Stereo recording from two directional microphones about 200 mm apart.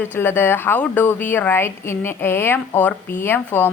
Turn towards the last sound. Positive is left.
turn(degrees=10)  # may be behind; listen again after turning